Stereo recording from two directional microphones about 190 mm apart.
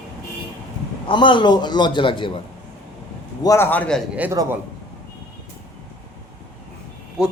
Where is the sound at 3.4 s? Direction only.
15° left (ahead or behind).